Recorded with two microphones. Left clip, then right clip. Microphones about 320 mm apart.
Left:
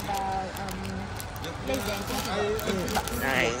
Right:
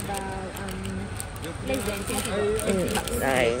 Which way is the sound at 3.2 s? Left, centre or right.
Centre.